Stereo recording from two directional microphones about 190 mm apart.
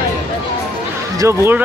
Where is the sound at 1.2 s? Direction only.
15° right (ahead or behind).